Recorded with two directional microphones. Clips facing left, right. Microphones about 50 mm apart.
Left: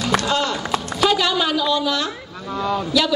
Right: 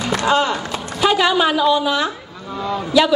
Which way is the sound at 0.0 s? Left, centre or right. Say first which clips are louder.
Right 3 dB; right.